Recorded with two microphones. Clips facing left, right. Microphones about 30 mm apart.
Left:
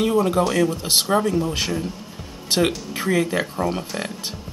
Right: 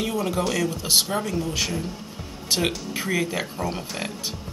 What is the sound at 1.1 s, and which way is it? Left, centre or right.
Speech, left.